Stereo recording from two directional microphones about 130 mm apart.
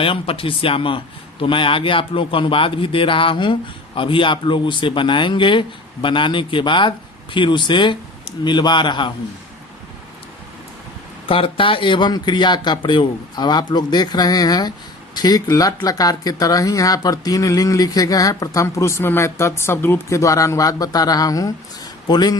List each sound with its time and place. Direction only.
0.0 s a man's voice: 45° left (ahead or behind)
11.3 s a man's voice: 45° left (ahead or behind)